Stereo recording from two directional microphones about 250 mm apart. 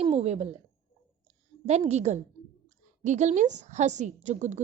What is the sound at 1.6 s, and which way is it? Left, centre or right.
A woman's voice, right.